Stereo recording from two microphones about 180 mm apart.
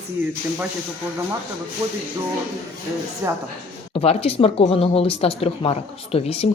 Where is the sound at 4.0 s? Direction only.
30° left (ahead or behind).